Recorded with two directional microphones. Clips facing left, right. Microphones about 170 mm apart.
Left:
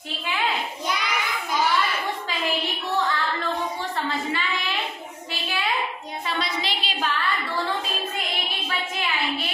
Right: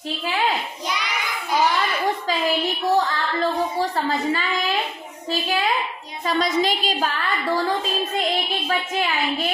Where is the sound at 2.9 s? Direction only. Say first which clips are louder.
Left 1 dB; 35° right (ahead or behind).